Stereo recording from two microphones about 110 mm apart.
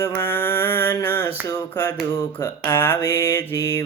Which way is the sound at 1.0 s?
20° left (ahead or behind).